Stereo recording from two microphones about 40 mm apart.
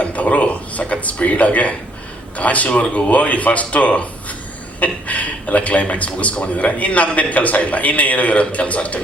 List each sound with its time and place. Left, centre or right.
0.0 s speech: left